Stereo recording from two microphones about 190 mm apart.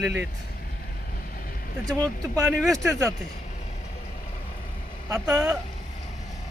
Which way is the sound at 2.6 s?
Centre (ahead or behind).